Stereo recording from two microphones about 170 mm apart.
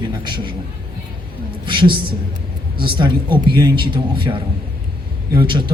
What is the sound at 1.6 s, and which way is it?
Speech, 30° right (ahead or behind).